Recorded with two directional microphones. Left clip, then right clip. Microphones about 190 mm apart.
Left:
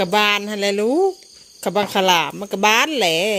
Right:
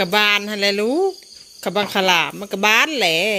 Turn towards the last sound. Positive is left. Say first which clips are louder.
# even
turn(degrees=20)  # may be behind; listen again after turning